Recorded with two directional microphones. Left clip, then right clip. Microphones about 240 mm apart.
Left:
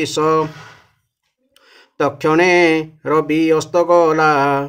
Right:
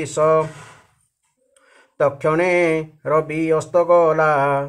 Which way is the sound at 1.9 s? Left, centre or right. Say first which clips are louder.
Left 3 dB; left.